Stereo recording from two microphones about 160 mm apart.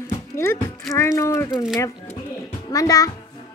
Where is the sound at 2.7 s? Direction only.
20° left (ahead or behind).